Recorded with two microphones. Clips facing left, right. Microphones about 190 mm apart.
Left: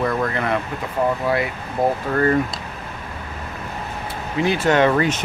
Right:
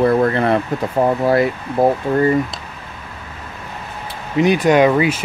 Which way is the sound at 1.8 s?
30° right (ahead or behind).